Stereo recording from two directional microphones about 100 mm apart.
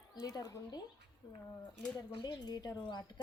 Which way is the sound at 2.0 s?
50° left (ahead or behind).